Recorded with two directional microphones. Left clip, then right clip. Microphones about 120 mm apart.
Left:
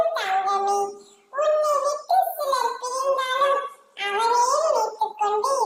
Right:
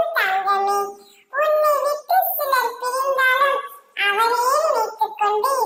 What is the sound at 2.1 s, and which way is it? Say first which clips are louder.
Child singing: right 2 dB; 40° right (ahead or behind).